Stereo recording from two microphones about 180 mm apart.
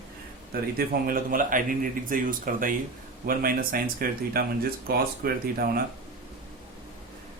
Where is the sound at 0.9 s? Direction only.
55° right (ahead or behind).